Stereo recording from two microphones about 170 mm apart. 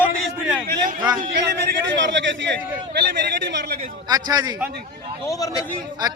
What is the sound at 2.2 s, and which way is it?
Speech, 90° right.